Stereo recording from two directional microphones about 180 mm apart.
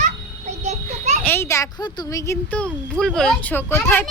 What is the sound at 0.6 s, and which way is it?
Children playing, 40° right (ahead or behind).